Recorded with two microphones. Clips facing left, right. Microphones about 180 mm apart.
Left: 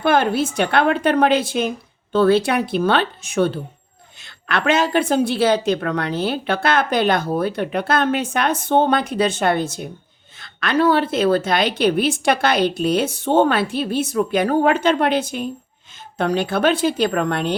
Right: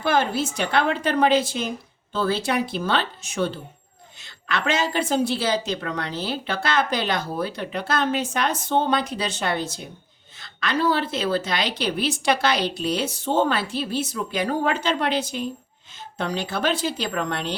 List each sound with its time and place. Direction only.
0.0 s a woman's voice: 60° left (ahead or behind)